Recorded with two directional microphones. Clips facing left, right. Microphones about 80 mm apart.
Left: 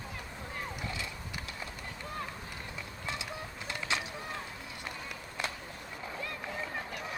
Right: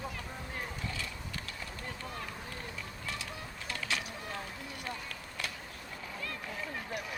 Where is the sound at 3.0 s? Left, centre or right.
Left.